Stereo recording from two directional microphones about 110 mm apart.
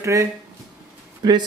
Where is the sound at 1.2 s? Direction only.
40° right (ahead or behind).